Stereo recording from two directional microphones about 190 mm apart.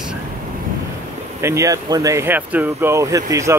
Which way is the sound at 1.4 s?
15° right (ahead or behind).